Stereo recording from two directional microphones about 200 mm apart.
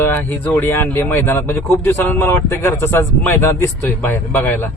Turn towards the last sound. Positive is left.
turn(degrees=10)  # may be behind; listen again after turning